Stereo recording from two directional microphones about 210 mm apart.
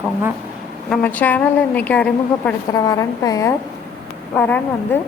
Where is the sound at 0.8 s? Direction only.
10° left (ahead or behind).